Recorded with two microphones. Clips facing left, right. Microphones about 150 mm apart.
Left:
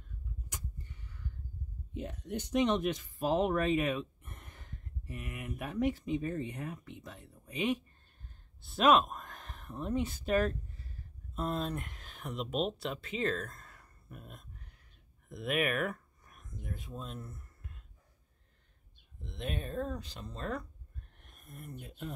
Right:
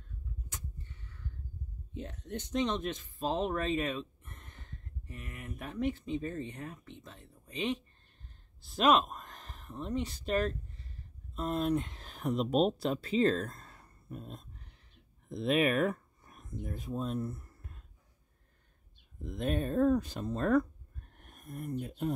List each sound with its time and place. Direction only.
0.5 s vehicle: 10° left (ahead or behind)
2.0 s speech: 10° left (ahead or behind)
11.6 s speech: 20° right (ahead or behind)
19.2 s speech: 45° right (ahead or behind)